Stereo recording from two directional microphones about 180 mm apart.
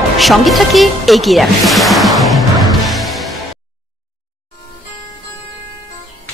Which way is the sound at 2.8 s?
Centre (ahead or behind).